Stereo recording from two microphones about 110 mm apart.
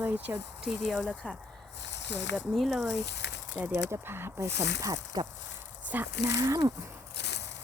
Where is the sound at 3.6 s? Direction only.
20° right (ahead or behind).